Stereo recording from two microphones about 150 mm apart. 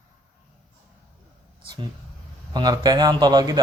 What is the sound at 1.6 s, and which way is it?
Speech, 30° right (ahead or behind).